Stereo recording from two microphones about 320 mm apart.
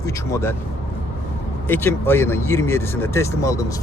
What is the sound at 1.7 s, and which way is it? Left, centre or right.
Speech, centre.